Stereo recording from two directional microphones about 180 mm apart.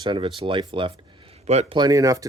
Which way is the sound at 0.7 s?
30° right (ahead or behind).